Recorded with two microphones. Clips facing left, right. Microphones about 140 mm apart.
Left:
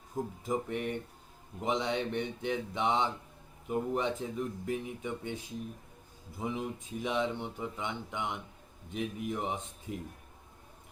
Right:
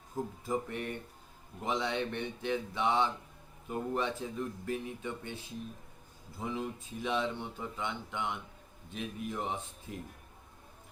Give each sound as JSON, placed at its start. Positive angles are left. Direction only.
{"t": 0.4, "sound": "speech", "side_deg": 20}